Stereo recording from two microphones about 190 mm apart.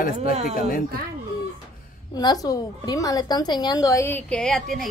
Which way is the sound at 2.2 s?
20° left (ahead or behind).